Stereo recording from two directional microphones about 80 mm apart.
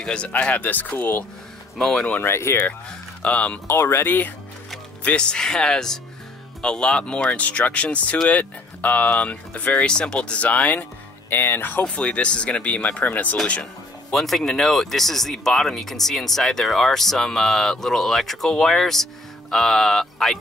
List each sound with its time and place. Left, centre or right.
0.0 s speech: centre
1.8 s speech: centre
2.2 s speech: left
2.9 s speech: centre
3.6 s speech: left
5.0 s speech: centre
11.8 s speech: centre
14.1 s speech: centre